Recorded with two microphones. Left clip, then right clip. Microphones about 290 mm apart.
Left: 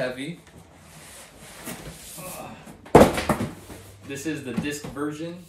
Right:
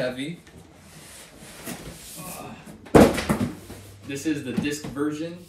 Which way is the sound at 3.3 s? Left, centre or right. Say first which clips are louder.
Left 2 dB; left.